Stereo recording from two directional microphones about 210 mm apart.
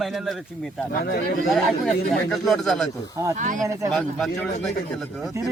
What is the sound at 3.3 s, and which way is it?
Speech, 40° right (ahead or behind).